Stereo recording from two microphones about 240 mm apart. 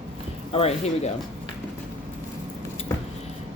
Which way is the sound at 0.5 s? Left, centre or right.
Left.